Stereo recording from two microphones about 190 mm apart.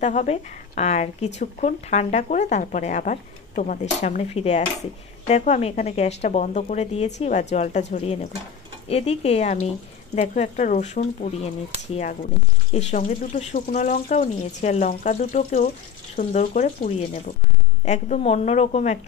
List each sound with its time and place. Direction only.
0.0 s speech: 40° left (ahead or behind)